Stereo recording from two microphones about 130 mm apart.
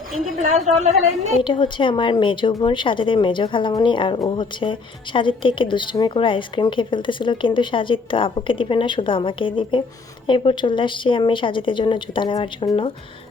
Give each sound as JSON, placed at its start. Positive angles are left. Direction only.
{"t": 0.3, "sound": "a woman's voice", "side_deg": -60}
{"t": 1.4, "sound": "speech", "side_deg": 40}